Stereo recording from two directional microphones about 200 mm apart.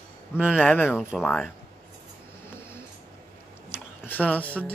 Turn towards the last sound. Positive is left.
turn(degrees=10)  # may be behind; listen again after turning